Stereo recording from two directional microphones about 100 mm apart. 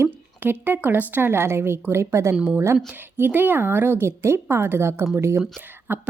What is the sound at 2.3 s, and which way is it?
Speech, 10° right (ahead or behind).